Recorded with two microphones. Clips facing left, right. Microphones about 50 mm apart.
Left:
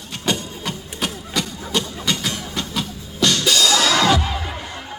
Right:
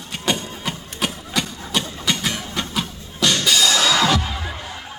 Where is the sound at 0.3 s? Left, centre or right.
Centre.